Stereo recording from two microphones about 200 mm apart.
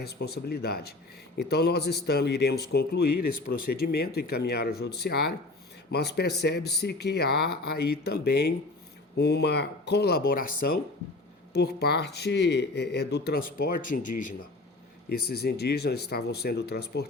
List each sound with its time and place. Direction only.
0.0 s speech: 50° left (ahead or behind)
11.5 s speech: 55° left (ahead or behind)
15.1 s speech: 50° left (ahead or behind)